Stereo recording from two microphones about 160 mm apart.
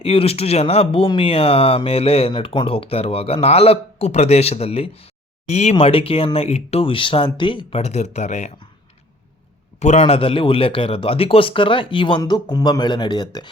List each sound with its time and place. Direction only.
0.0 s speech: 35° left (ahead or behind)
9.8 s speech: 40° left (ahead or behind); by 13.5 s 25° left (ahead or behind)